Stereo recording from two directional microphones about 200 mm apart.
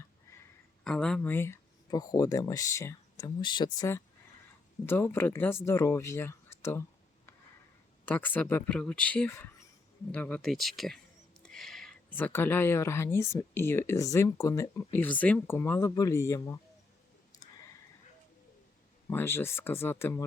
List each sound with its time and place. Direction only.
0.9 s speech: 5° left (ahead or behind)
8.0 s speech: 10° left (ahead or behind)
17.3 s clicking: 15° left (ahead or behind)
19.1 s speech: 10° left (ahead or behind)